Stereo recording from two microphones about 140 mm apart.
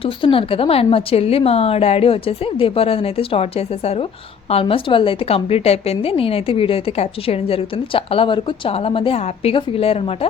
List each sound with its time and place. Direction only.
0.0 s a woman's voice: 40° left (ahead or behind)